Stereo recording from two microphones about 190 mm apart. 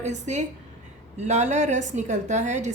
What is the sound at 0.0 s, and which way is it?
A woman's voice, 40° right (ahead or behind).